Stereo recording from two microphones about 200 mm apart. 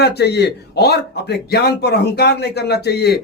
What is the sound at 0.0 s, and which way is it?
A man's voice, 55° left (ahead or behind).